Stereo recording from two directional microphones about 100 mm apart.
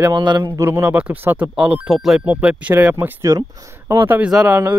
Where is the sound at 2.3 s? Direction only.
15° right (ahead or behind).